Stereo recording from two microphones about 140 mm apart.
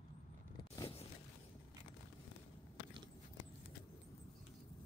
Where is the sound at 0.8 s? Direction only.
45° left (ahead or behind).